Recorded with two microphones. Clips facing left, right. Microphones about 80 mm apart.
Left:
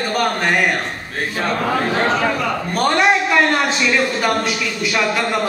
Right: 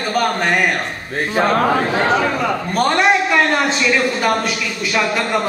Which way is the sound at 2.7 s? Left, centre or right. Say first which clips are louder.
Even; centre.